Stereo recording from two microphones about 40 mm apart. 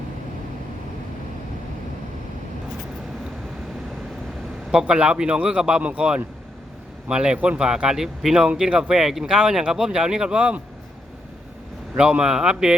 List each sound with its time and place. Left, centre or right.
4.9 s a man's voice: right
10.3 s speech: right
11.9 s a man's voice: right